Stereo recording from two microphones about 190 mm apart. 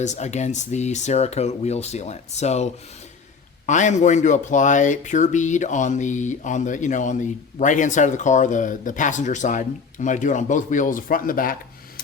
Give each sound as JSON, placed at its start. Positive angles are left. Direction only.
{"t": 0.0, "sound": "speech", "side_deg": 40}
{"t": 3.7, "sound": "speech", "side_deg": 40}